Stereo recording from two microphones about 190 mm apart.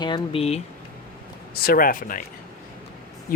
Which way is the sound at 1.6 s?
50° left (ahead or behind).